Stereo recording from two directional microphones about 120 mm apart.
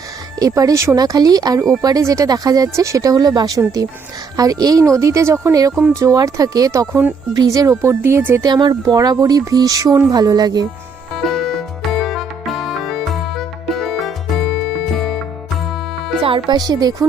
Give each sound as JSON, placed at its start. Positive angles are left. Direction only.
{"t": 0.3, "sound": "speech", "side_deg": -30}
{"t": 8.4, "sound": "speech", "side_deg": -40}
{"t": 11.3, "sound": "music", "side_deg": 0}
{"t": 16.2, "sound": "music", "side_deg": -45}
{"t": 16.6, "sound": "speech", "side_deg": -35}